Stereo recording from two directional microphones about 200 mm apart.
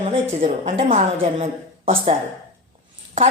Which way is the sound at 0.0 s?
35° right (ahead or behind).